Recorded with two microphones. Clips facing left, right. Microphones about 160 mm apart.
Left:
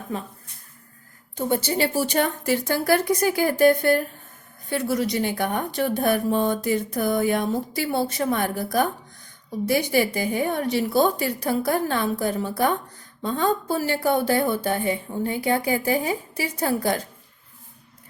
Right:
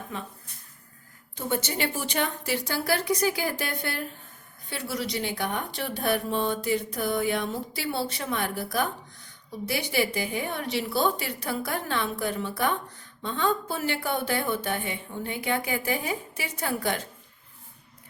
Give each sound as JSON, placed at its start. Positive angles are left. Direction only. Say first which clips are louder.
{"t": 0.1, "sound": "a woman's voice", "louder": "left 6 dB", "side_deg": 40}
{"t": 1.4, "sound": "a woman's voice", "louder": "left 6 dB", "side_deg": 35}